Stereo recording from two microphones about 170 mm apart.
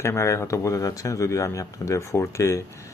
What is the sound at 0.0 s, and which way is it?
Speech, 15° left (ahead or behind).